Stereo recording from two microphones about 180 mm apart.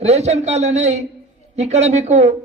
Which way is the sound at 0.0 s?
35° right (ahead or behind).